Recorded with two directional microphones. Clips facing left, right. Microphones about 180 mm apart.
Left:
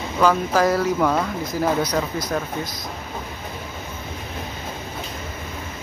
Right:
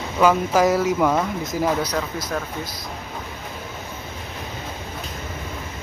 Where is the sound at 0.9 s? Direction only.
5° right (ahead or behind).